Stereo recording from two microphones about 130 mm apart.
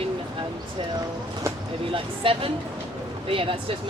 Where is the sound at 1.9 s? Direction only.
45° right (ahead or behind).